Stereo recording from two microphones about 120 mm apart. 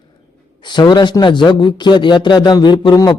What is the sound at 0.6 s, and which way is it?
A man's voice, 40° left (ahead or behind).